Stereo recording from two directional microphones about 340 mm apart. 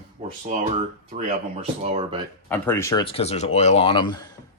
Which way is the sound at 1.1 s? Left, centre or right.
Centre.